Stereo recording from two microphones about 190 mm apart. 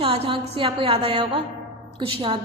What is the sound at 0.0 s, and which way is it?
A woman's voice, 30° right (ahead or behind).